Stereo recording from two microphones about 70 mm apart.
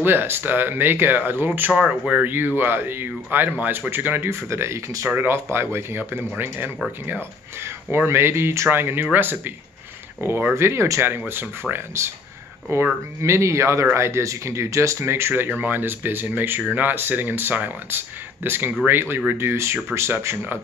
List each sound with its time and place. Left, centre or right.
0.0 s speech: right
1.7 s speech: centre
2.2 s speech: right
10.5 s speech: right